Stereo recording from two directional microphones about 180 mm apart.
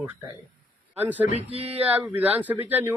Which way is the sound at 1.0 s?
10° right (ahead or behind).